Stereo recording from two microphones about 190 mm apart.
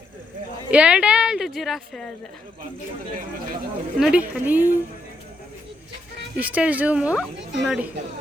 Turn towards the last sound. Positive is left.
turn(degrees=-5)  # may be behind; listen again after turning